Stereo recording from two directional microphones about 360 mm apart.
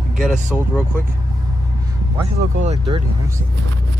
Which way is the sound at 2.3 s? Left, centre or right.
Centre.